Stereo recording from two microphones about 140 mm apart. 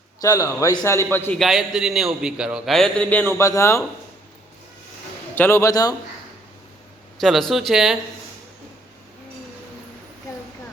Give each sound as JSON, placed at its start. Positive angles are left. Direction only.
{"t": 0.2, "sound": "a man's voice", "side_deg": 25}
{"t": 1.4, "sound": "a man's voice", "side_deg": 0}
{"t": 5.3, "sound": "a man's voice", "side_deg": 15}
{"t": 7.2, "sound": "a man's voice", "side_deg": 0}